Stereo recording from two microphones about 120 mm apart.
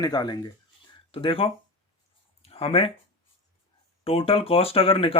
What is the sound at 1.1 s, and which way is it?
Speech, 50° left (ahead or behind).